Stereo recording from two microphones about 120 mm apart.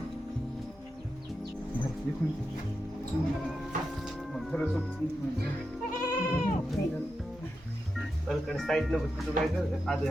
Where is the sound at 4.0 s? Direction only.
Centre (ahead or behind).